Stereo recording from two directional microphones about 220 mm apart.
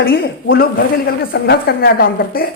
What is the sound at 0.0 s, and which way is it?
A woman's voice, 45° left (ahead or behind).